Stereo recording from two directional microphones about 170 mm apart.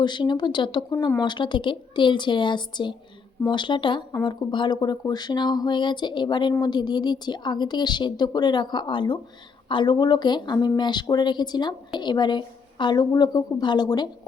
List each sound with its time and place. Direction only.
0.0 s speech: 25° left (ahead or behind)